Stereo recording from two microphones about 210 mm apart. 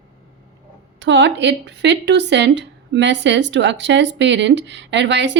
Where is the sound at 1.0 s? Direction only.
60° right (ahead or behind).